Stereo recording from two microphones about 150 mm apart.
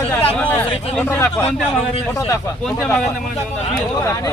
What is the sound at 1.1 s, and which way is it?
Speech, 15° left (ahead or behind).